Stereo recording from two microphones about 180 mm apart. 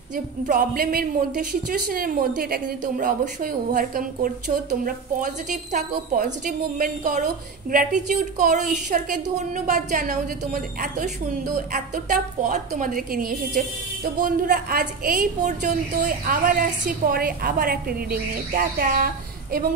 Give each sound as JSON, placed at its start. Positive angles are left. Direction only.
{"t": 0.1, "sound": "a woman's voice", "side_deg": -50}